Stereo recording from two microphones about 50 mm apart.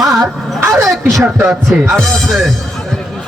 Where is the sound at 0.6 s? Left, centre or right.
Right.